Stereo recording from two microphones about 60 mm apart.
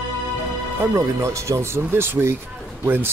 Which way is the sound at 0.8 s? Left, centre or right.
Right.